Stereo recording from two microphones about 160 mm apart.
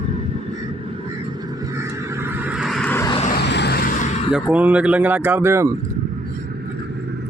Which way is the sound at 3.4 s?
90° left.